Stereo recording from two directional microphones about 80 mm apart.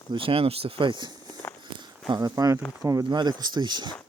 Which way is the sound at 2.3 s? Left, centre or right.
Right.